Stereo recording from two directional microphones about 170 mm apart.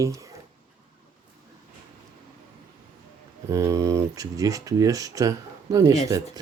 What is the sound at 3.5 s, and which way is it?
Speech, 20° right (ahead or behind).